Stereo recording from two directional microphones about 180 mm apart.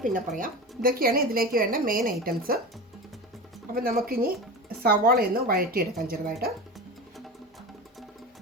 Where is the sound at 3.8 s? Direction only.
55° right (ahead or behind).